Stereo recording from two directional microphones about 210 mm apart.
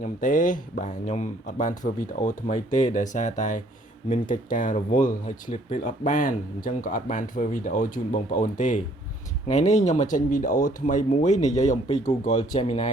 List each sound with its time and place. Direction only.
0.0 s speech: 40° left (ahead or behind)